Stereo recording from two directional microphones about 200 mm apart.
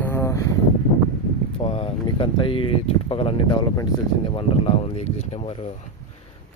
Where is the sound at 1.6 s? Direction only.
30° left (ahead or behind).